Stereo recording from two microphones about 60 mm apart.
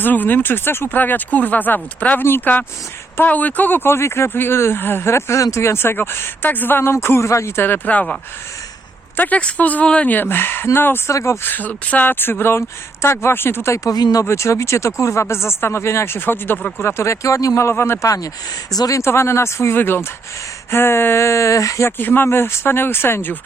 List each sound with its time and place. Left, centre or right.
0.0 s speech: left
5.4 s speech: left
7.9 s a woman's voice: left
9.1 s a woman's voice: left
10.2 s speech: left
11.1 s speech: left
11.4 s speech: left
13.9 s speech: left
14.3 s speech: left
16.8 s speech: left
18.0 s speech: left
19.0 s speech: left
19.7 s speech: left
21.8 s speech: left